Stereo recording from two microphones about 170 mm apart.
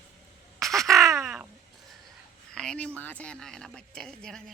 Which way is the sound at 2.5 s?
5° left (ahead or behind).